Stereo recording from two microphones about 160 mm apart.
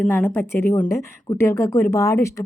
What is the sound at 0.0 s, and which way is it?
A woman's voice, 10° left (ahead or behind).